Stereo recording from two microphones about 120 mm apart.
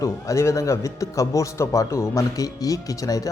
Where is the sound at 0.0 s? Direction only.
25° left (ahead or behind).